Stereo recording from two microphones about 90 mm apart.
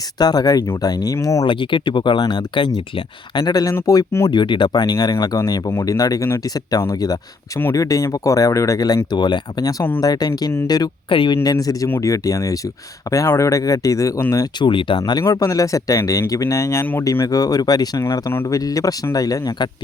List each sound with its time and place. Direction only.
0.2 s speech: 45° left (ahead or behind)
1.5 s speech: 65° left (ahead or behind)
2.6 s speech: 80° left
3.3 s speech: 50° left (ahead or behind)
4.3 s speech: 60° left (ahead or behind); by 9.0 s 40° left (ahead or behind)
9.0 s speech: 55° left (ahead or behind)
11.1 s speech: 70° left (ahead or behind)
11.4 s speech: 40° left (ahead or behind)
14.6 s speech: 65° left (ahead or behind)
15.2 s speech: 40° left (ahead or behind)
17.9 s speech: 30° left (ahead or behind)